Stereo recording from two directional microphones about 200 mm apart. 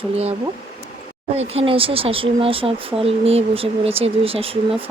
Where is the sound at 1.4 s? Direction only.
30° right (ahead or behind).